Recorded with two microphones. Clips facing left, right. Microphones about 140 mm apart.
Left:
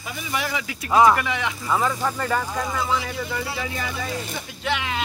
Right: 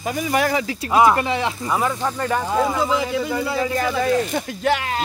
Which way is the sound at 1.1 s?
30° right (ahead or behind).